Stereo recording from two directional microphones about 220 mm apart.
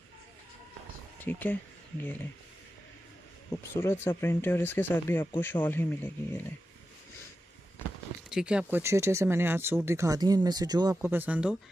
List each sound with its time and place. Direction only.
1.2 s speech: 10° left (ahead or behind)
3.7 s speech: 10° left (ahead or behind)
8.3 s speech: 5° right (ahead or behind)